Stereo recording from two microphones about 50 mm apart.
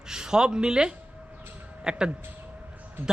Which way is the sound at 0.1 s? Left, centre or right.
Centre.